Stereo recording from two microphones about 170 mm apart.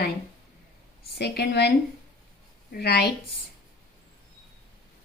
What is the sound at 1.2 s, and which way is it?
Speech, 75° left (ahead or behind).